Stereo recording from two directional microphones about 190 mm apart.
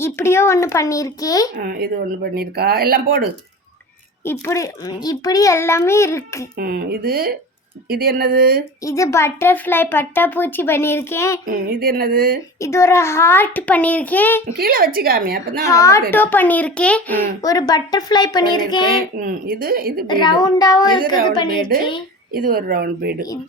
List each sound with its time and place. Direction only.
0.0 s speech: 15° left (ahead or behind)
1.5 s speech: 50° right (ahead or behind)
4.2 s speech: 15° left (ahead or behind)
6.6 s speech: 55° right (ahead or behind)
8.8 s speech: 15° left (ahead or behind)
11.4 s speech: 50° right (ahead or behind)
12.5 s speech: 15° left (ahead or behind)
14.5 s speech: 50° right (ahead or behind)
15.6 s speech: 15° left (ahead or behind)
19.2 s speech: 50° right (ahead or behind)
20.1 s speech: 25° left (ahead or behind)
21.7 s speech: 50° right (ahead or behind)